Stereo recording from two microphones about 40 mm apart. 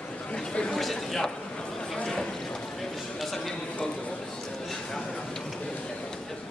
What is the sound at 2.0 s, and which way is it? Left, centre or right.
Boat, centre.